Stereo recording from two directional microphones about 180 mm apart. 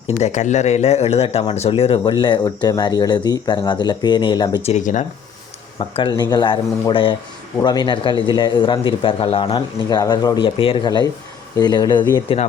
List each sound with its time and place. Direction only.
0.2 s speech: 40° left (ahead or behind); by 4.7 s 25° left (ahead or behind)
4.7 s speech: 45° left (ahead or behind)
6.0 s speech: 25° left (ahead or behind)